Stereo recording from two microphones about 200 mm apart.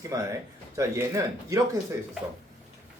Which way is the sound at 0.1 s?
15° right (ahead or behind).